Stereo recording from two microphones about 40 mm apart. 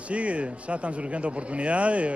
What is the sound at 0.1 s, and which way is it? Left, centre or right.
Speech, right.